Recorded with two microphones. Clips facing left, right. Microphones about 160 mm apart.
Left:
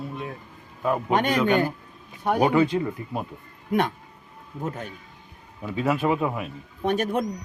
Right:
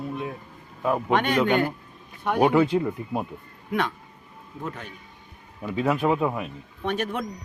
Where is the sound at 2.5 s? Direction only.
5° right (ahead or behind).